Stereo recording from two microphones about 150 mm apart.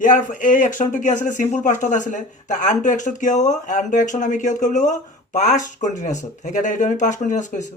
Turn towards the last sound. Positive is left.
turn(degrees=55)  # may be behind; listen again after turning